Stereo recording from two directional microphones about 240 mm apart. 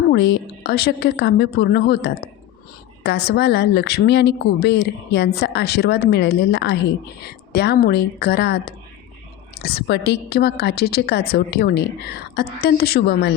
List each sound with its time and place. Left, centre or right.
0.1 s a woman's voice: left